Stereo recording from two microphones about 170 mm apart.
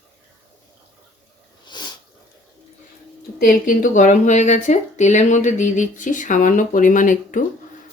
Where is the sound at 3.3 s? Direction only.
55° left (ahead or behind).